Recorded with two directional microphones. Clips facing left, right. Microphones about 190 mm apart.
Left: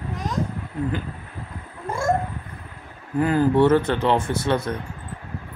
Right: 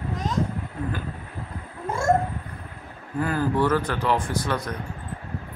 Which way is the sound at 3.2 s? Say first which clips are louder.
Left 6 dB; 20° left (ahead or behind).